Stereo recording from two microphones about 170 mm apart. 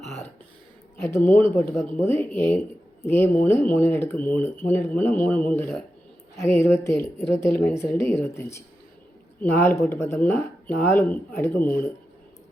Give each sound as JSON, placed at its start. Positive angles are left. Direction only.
{"t": 1.0, "sound": "a woman's voice", "side_deg": 15}